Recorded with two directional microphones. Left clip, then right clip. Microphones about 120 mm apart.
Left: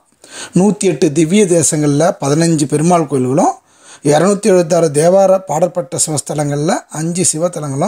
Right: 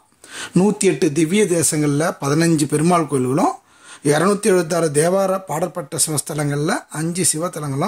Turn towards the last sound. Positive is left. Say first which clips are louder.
# left 6 dB
turn(degrees=35)  # may be behind; listen again after turning